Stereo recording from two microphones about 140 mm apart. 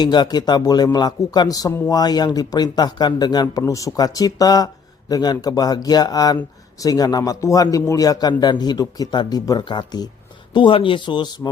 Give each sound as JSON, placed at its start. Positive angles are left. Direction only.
{"t": 0.0, "sound": "speech", "side_deg": 30}